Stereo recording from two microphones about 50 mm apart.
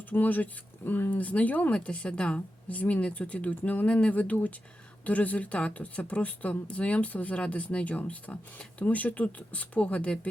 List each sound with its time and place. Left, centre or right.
0.1 s speech: left
1.7 s speech: left